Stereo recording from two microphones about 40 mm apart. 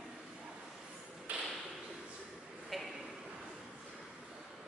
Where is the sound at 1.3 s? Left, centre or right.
Right.